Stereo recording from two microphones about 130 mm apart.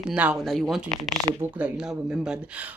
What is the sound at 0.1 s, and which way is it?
Speech, 10° right (ahead or behind).